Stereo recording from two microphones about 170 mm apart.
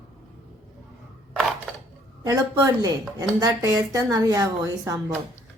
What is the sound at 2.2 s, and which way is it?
A woman's voice, 20° right (ahead or behind).